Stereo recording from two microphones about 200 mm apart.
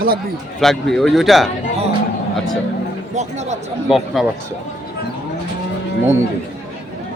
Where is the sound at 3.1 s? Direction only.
35° right (ahead or behind).